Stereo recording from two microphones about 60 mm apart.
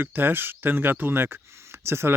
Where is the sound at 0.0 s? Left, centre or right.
Right.